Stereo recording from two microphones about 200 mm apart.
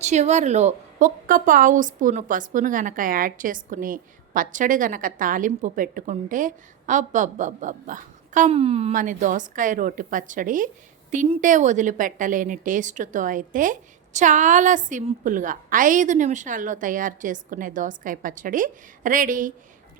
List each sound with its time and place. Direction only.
0.0 s a woman's voice: 35° right (ahead or behind)